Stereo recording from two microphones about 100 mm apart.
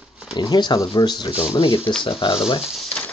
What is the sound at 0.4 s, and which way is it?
Speech, 50° left (ahead or behind).